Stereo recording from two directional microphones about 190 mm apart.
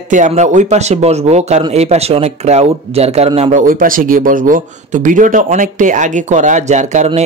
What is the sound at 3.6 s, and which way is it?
Speech, 45° right (ahead or behind).